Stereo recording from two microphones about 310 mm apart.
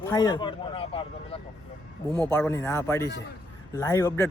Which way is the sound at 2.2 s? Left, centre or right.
Centre.